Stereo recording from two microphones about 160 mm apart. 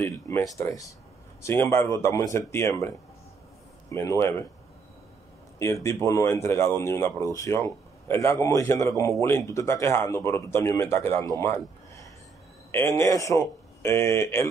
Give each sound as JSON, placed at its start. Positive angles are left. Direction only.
{"t": 0.0, "sound": "a man's voice", "side_deg": 15}
{"t": 3.9, "sound": "a man's voice", "side_deg": 15}
{"t": 5.6, "sound": "a man's voice", "side_deg": 20}
{"t": 12.7, "sound": "a man's voice", "side_deg": 15}